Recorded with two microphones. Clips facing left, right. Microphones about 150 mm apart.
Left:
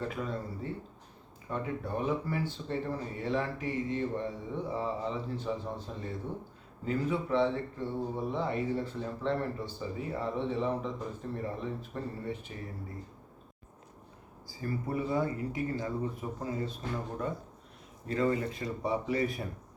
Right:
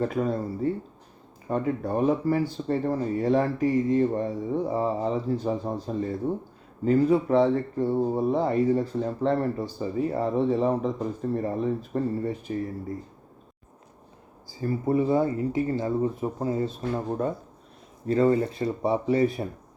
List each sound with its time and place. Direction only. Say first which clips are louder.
0.0 s speech: right 10 dB; 40° right (ahead or behind)
14.6 s speech: right 9 dB; 25° right (ahead or behind)